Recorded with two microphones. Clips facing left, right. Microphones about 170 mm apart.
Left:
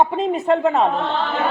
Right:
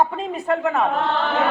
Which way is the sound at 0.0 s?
20° left (ahead or behind).